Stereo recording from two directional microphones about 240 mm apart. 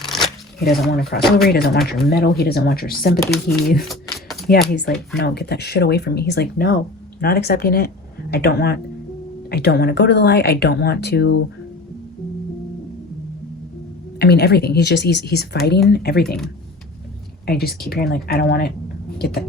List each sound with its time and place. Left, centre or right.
0.0 s shuffling cards: centre
0.7 s speech: centre
1.4 s speech: left
4.5 s speech: left
14.2 s speech: left
17.4 s speech: left